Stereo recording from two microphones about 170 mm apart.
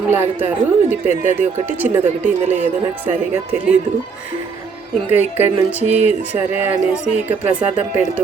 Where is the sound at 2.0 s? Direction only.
45° right (ahead or behind).